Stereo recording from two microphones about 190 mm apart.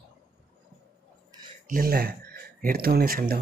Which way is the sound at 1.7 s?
50° right (ahead or behind).